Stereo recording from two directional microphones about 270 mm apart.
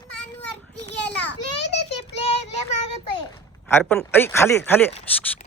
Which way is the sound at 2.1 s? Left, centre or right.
Left.